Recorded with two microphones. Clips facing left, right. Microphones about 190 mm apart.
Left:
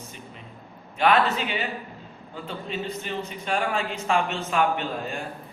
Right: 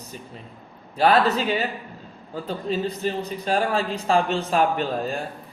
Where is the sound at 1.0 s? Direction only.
35° right (ahead or behind).